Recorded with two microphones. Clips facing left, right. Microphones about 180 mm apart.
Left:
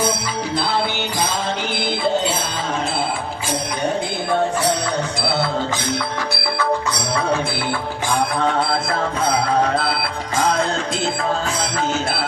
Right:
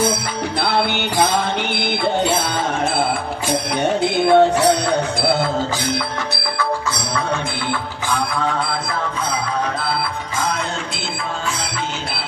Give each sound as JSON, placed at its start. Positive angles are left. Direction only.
{"t": 0.6, "sound": "music", "side_deg": -65}
{"t": 4.0, "sound": "music", "side_deg": -75}